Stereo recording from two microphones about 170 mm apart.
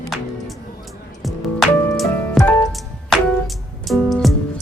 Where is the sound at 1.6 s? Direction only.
Centre (ahead or behind).